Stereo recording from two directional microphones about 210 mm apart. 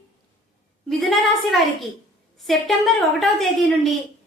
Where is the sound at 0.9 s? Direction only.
Centre (ahead or behind).